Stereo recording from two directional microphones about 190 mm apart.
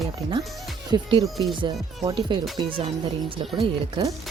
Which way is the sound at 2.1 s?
25° right (ahead or behind).